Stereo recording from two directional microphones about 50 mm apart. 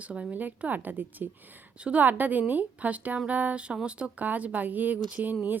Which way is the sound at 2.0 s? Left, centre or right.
Right.